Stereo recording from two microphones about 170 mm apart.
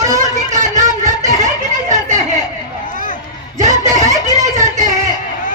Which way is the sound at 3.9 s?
20° right (ahead or behind).